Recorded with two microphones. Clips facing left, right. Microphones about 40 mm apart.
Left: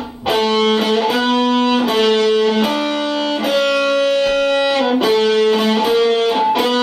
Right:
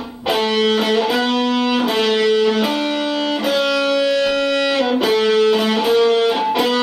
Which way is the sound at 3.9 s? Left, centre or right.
Centre.